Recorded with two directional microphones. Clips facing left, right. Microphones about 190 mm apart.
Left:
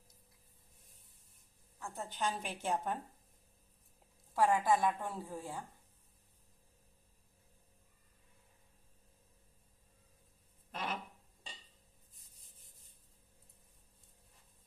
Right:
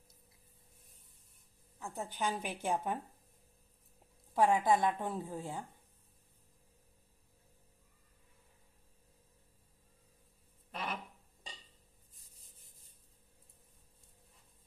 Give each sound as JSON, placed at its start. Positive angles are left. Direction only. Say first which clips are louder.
{"t": 1.8, "sound": "a woman's voice", "louder": "right 1 dB", "side_deg": -15}
{"t": 4.4, "sound": "a woman's voice", "louder": "right 2 dB", "side_deg": -20}
{"t": 10.7, "sound": "a sound", "louder": "even", "side_deg": 0}